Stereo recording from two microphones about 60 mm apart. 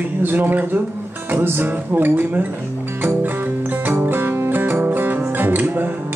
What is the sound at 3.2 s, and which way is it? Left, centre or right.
Music, right.